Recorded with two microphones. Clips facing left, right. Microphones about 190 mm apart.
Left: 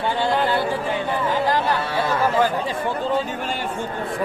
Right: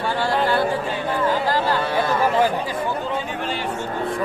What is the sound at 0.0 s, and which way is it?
Speech, 20° left (ahead or behind).